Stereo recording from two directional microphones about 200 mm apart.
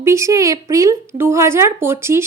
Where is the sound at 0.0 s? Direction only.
15° right (ahead or behind).